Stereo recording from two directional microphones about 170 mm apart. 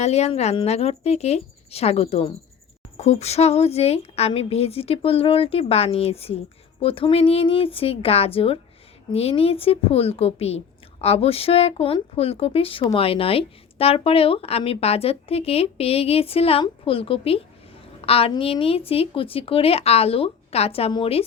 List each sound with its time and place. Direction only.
0.0 s speech: 40° left (ahead or behind)